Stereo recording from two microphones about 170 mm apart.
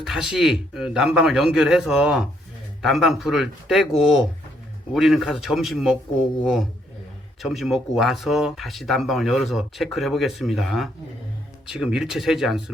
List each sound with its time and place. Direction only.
0.0 s speech: 5° right (ahead or behind)